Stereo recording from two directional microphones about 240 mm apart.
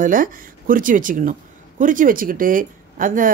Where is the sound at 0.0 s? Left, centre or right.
Right.